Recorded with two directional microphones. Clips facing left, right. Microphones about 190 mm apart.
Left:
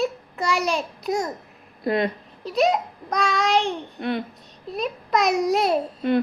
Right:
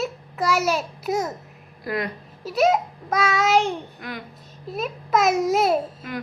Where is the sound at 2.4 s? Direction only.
5° right (ahead or behind).